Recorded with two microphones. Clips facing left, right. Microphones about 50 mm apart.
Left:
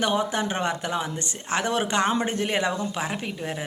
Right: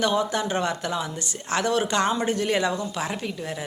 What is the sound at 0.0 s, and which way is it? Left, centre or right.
Speech, left.